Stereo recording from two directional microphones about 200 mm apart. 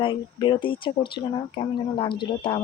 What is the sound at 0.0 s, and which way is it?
Speech, 25° left (ahead or behind).